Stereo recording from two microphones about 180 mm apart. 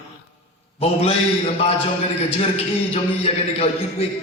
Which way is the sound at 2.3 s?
35° left (ahead or behind).